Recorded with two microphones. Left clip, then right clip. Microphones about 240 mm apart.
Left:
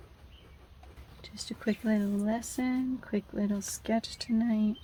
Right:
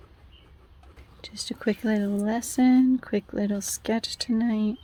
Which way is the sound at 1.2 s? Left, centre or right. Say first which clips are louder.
Right 7 dB; right.